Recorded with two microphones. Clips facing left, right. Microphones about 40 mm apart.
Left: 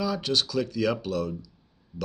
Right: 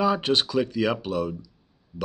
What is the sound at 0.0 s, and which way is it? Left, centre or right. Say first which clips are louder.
Speech: right 5 dB; right.